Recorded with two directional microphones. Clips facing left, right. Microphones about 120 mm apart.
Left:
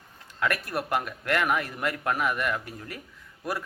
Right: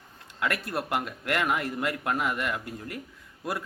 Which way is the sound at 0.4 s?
25° right (ahead or behind).